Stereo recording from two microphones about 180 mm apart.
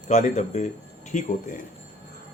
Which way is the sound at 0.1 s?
40° left (ahead or behind).